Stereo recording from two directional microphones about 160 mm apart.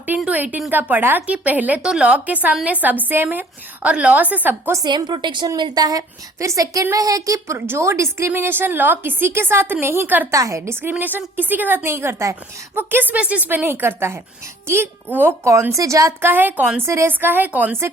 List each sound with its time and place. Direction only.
0.2 s a woman's voice: 10° right (ahead or behind)
4.8 s a woman's voice: 25° right (ahead or behind)